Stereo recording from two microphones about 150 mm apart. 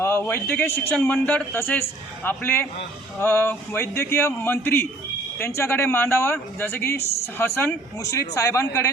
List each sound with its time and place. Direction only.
0.0 s a man's voice: 15° left (ahead or behind)
7.0 s speech: 45° left (ahead or behind)
7.3 s speech: 15° left (ahead or behind)